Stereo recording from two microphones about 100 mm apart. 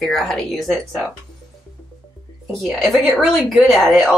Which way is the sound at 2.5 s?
Centre (ahead or behind).